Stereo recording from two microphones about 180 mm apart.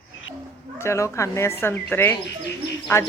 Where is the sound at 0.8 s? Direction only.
15° left (ahead or behind).